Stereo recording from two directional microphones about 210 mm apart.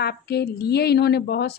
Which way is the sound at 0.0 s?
50° left (ahead or behind).